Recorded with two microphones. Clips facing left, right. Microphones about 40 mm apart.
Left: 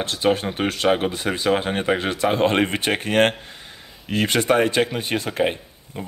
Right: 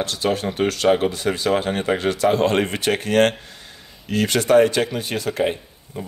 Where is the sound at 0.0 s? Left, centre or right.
Left.